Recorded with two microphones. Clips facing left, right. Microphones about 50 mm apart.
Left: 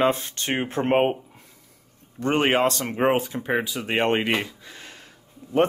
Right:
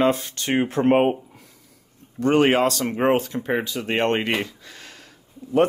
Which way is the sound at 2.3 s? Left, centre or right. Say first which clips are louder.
Right 3 dB; left.